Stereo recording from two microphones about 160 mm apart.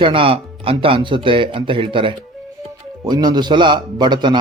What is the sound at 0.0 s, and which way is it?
A man's voice, 35° right (ahead or behind).